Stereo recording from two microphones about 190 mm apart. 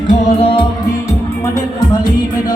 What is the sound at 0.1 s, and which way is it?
Music, 35° left (ahead or behind).